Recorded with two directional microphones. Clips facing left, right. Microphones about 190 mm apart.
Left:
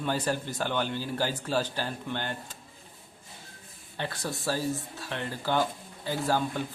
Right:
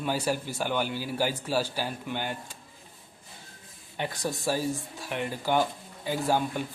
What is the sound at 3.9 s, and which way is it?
Speech, 15° right (ahead or behind).